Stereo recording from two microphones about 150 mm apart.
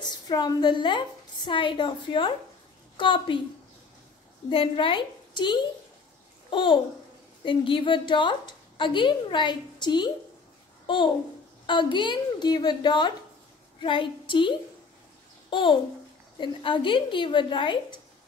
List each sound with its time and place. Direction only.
0.0 s a woman's voice: 30° left (ahead or behind)
4.5 s a woman's voice: 35° left (ahead or behind)
11.6 s a woman's voice: 30° left (ahead or behind)
15.5 s a woman's voice: 30° left (ahead or behind)